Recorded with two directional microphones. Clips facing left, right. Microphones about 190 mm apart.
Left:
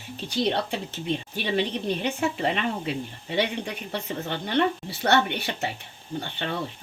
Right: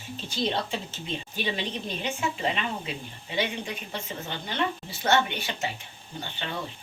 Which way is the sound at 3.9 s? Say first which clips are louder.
Left 8 dB; 65° left (ahead or behind).